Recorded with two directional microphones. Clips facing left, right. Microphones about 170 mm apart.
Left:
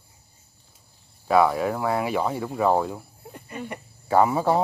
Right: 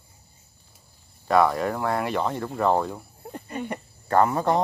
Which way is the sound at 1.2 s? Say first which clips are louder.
Left 1 dB; 5° left (ahead or behind).